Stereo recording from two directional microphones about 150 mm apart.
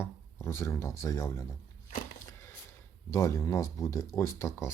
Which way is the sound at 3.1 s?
20° left (ahead or behind).